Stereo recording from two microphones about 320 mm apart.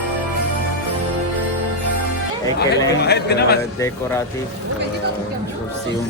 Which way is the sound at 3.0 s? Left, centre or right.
Left.